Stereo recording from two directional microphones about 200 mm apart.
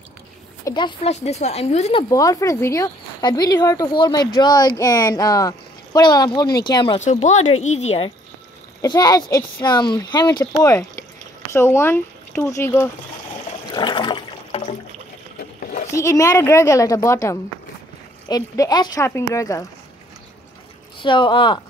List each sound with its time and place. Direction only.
0.7 s speech: 20° left (ahead or behind)
2.0 s speech: 15° left (ahead or behind)
7.0 s speech: 35° left (ahead or behind)
8.8 s speech: 20° left (ahead or behind)
13.7 s toilet flush: 20° left (ahead or behind)
15.9 s speech: 15° left (ahead or behind)
21.0 s speech: 25° left (ahead or behind)